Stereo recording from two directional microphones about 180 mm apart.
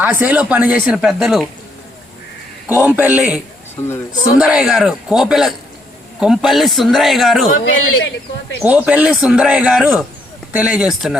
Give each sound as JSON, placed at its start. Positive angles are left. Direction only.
{"t": 0.0, "sound": "speech", "side_deg": -10}
{"t": 2.6, "sound": "speech", "side_deg": -10}
{"t": 3.8, "sound": "speech", "side_deg": 15}
{"t": 4.4, "sound": "a man's voice", "side_deg": -5}
{"t": 7.6, "sound": "a man's voice", "side_deg": 90}
{"t": 8.6, "sound": "speech", "side_deg": -10}